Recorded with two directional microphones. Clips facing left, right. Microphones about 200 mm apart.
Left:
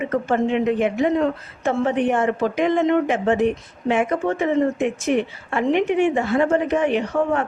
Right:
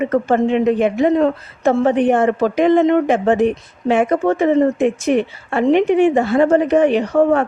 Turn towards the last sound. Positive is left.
turn(degrees=-35)  # may be behind; listen again after turning